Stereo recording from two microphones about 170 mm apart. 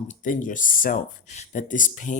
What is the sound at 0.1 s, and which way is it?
Speech, 50° left (ahead or behind).